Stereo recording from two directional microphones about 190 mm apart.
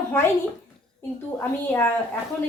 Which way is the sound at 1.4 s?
10° left (ahead or behind).